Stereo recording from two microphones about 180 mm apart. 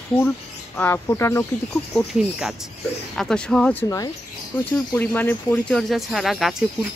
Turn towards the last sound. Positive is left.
turn(degrees=0)  # may be behind; listen again after turning